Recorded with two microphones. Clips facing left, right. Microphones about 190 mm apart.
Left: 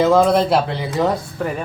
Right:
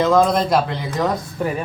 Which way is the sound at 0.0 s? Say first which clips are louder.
Left 2 dB; 5° left (ahead or behind).